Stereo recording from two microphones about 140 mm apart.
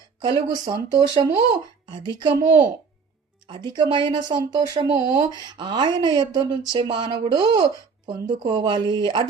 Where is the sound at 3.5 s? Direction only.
30° right (ahead or behind).